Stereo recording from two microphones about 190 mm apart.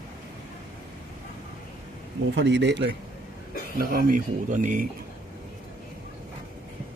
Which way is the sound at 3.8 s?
45° right (ahead or behind).